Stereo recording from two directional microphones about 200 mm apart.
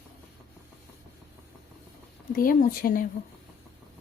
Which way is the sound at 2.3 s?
45° left (ahead or behind).